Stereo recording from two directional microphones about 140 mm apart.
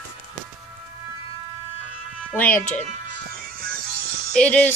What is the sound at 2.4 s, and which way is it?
Music, 15° left (ahead or behind).